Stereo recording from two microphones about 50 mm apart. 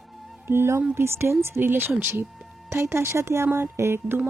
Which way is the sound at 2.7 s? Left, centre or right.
Right.